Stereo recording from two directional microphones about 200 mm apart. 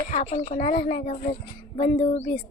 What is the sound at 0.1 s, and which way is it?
Speech, 35° left (ahead or behind).